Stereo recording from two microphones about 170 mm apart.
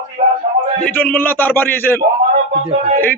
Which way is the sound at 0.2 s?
45° right (ahead or behind).